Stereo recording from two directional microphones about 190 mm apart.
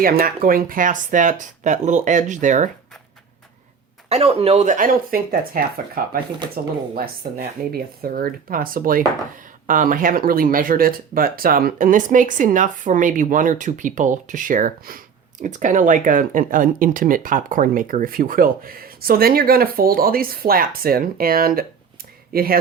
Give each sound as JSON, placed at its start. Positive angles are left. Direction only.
{"t": 0.0, "sound": "speech", "side_deg": -50}
{"t": 4.1, "sound": "speech", "side_deg": -35}